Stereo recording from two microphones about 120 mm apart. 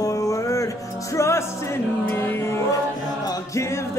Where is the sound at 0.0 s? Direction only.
25° left (ahead or behind).